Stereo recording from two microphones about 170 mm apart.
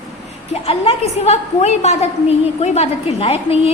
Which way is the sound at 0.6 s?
35° left (ahead or behind).